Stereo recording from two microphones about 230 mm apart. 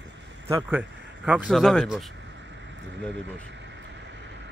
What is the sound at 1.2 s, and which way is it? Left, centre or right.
Speech, centre.